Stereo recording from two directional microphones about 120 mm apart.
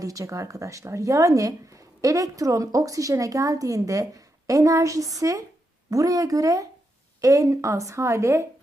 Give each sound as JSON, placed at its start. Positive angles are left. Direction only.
{"t": 0.0, "sound": "speech", "side_deg": -30}